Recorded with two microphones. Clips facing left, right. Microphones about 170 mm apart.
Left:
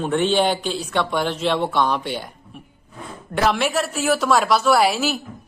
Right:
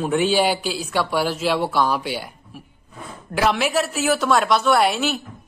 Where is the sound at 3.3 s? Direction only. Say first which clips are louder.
Even; centre (ahead or behind).